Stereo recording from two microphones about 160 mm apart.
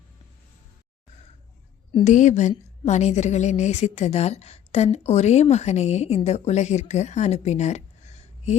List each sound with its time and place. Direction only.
2.0 s a woman's voice: 50° left (ahead or behind)